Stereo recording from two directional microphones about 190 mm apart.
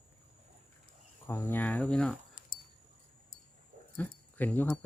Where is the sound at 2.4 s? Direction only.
45° left (ahead or behind).